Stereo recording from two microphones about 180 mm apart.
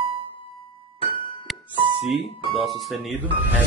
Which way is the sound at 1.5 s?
Centre (ahead or behind).